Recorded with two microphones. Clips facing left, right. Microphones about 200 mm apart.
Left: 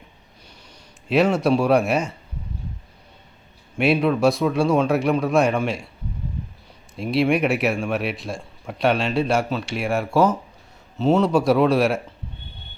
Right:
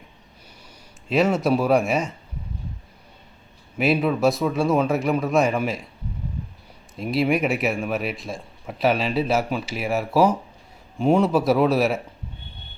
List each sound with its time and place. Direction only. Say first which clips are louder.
1.0 s speech: left 2 dB; centre (ahead or behind)
3.8 s speech: left 2 dB; centre (ahead or behind)
6.9 s speech: left 2 dB; centre (ahead or behind)